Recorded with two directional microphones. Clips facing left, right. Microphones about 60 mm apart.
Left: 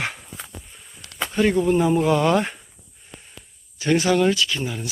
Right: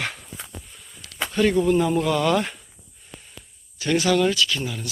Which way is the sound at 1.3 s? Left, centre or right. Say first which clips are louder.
Even; centre.